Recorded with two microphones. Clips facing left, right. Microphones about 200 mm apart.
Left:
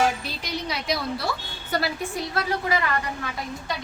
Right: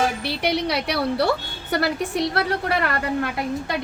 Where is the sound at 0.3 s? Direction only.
70° right (ahead or behind).